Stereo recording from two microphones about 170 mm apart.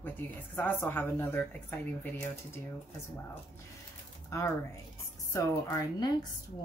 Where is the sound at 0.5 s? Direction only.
10° left (ahead or behind).